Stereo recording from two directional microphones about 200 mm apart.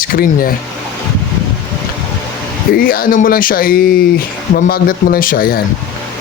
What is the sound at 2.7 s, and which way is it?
Speech, 45° left (ahead or behind).